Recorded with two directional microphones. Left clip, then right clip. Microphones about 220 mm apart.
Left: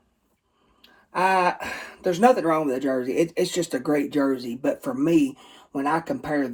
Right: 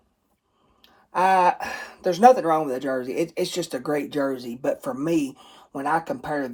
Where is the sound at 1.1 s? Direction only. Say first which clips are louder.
Right 2 dB; 25° right (ahead or behind).